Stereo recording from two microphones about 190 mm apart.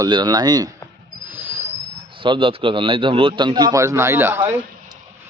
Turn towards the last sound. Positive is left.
turn(degrees=-10)  # may be behind; listen again after turning